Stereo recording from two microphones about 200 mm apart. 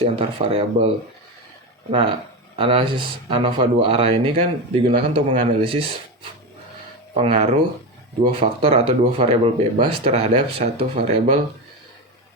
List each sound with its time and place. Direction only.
0.0 s speech: 30° right (ahead or behind)
1.9 s speech: 25° right (ahead or behind)
7.1 s speech: 30° right (ahead or behind)